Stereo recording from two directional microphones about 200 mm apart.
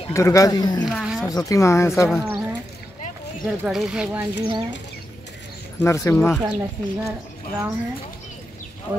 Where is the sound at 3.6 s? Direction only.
5° right (ahead or behind).